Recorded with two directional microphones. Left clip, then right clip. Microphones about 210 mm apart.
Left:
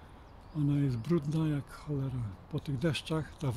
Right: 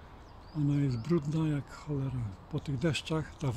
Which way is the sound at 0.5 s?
15° left (ahead or behind).